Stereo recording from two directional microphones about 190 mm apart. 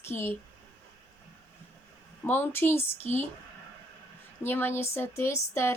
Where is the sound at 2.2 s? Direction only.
10° left (ahead or behind).